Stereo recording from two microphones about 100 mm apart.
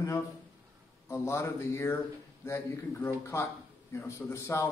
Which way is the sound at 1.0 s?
25° left (ahead or behind).